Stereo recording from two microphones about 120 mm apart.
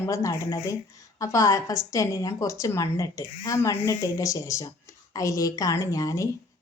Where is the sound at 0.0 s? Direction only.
25° left (ahead or behind).